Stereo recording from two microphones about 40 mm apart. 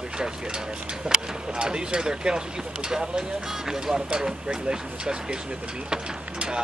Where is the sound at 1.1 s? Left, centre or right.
Centre.